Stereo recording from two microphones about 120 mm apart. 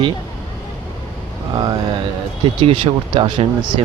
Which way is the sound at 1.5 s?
35° right (ahead or behind).